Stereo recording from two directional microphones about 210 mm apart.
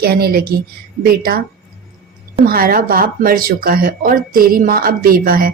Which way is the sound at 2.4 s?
45° right (ahead or behind).